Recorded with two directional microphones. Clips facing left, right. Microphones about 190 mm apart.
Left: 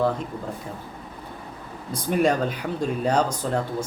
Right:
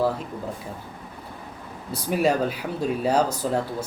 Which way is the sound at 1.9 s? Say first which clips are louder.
Left 1 dB; 5° right (ahead or behind).